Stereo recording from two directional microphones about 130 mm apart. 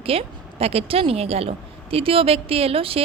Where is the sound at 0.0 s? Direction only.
45° right (ahead or behind).